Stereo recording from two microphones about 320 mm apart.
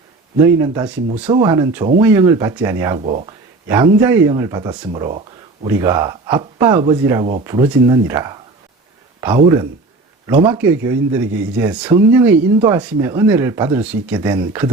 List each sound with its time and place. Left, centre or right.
0.3 s speech: centre
3.0 s speech: right
3.7 s speech: centre